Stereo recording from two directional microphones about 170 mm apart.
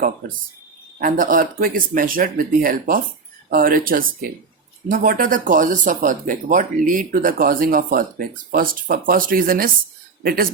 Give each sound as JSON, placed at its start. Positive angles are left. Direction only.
{"t": 0.9, "sound": "speech", "side_deg": -55}